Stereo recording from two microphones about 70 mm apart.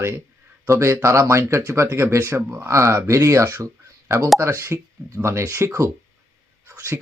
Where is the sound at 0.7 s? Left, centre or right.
Right.